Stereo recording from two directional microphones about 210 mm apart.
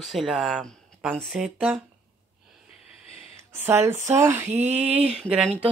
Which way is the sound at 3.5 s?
10° right (ahead or behind).